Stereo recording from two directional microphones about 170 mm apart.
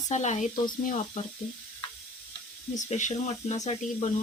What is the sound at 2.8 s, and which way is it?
Speech, 45° left (ahead or behind).